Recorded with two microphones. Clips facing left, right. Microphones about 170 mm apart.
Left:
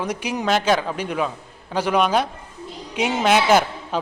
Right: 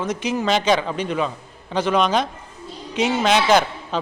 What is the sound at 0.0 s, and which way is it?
A man's voice, 10° left (ahead or behind).